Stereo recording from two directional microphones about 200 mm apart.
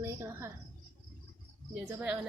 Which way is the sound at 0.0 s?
15° right (ahead or behind).